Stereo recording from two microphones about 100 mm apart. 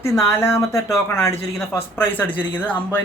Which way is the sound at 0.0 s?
30° left (ahead or behind).